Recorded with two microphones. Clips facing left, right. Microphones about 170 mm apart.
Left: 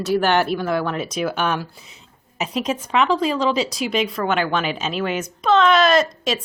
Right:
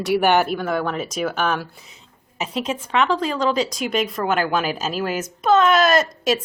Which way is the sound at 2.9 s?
Centre (ahead or behind).